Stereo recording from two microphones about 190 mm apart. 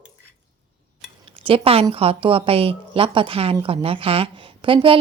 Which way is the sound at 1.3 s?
30° right (ahead or behind).